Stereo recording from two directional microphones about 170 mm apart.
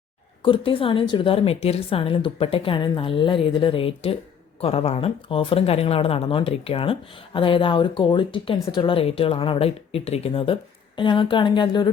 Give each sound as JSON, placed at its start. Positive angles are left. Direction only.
{"t": 0.4, "sound": "a woman's voice", "side_deg": 30}